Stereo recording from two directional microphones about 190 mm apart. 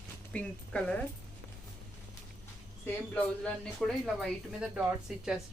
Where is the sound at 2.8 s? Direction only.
10° left (ahead or behind).